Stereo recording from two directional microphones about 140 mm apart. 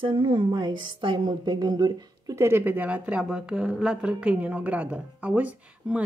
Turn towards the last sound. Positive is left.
turn(degrees=-10)  # may be behind; listen again after turning